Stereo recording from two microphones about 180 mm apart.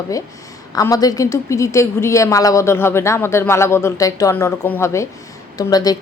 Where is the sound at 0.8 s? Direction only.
20° left (ahead or behind).